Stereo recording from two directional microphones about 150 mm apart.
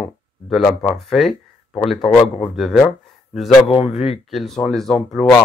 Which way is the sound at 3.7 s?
40° left (ahead or behind).